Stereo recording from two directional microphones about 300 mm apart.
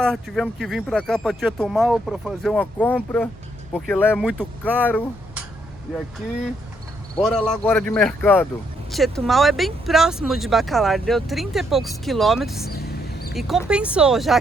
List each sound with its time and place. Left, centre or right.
0.0 s speech: centre
7.2 s speech: centre
12.7 s a sound: left
13.3 s speech: centre